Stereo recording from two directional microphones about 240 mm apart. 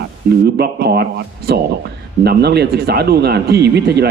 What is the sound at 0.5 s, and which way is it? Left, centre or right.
Speech, right.